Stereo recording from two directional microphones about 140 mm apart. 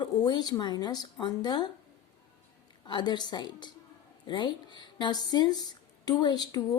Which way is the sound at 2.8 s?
30° left (ahead or behind).